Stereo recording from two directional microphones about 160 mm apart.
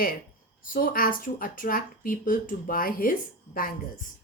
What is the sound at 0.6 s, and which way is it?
A woman's voice, 60° left (ahead or behind).